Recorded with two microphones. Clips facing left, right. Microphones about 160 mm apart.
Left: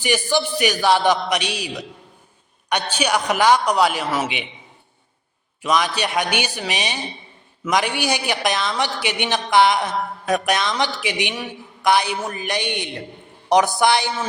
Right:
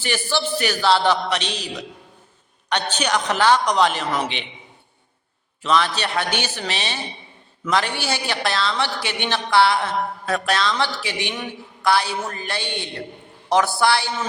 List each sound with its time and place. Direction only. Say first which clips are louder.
0.0 s a woman's voice: left 4 dB; 15° left (ahead or behind)
5.6 s a woman's voice: even; 15° left (ahead or behind)